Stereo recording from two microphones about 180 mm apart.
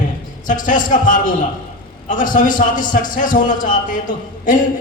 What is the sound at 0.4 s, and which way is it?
A man's voice, 45° left (ahead or behind).